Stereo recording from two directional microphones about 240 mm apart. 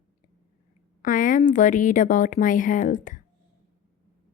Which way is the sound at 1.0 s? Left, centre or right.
Left.